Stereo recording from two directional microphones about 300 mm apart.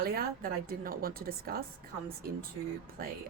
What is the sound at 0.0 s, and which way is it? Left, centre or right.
A woman's voice, right.